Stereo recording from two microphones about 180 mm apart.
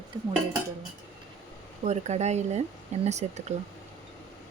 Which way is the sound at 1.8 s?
40° right (ahead or behind).